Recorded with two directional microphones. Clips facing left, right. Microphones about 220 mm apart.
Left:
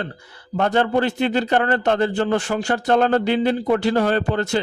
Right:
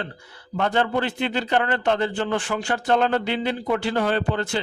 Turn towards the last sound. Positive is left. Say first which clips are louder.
# left 4 dB
turn(degrees=40)  # may be behind; listen again after turning